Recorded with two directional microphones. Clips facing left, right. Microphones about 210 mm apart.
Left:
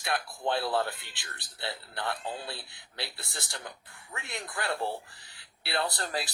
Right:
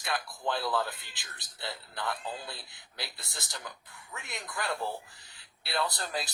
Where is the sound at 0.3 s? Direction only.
25° left (ahead or behind).